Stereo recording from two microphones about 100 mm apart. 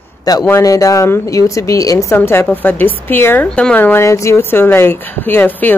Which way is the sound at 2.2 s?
20° left (ahead or behind).